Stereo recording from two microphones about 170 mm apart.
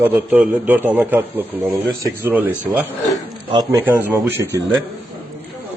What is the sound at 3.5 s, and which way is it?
Speech, 25° right (ahead or behind).